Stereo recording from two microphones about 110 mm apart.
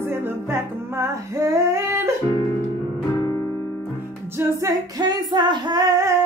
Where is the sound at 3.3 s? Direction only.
20° left (ahead or behind).